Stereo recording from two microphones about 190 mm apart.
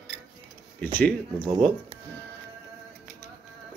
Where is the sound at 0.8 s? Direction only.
10° left (ahead or behind).